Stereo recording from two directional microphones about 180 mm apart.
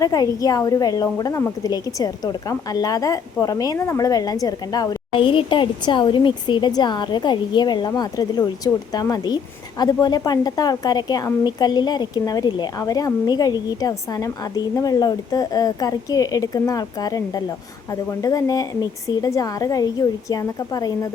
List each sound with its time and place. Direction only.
0.0 s a woman's voice: 20° left (ahead or behind)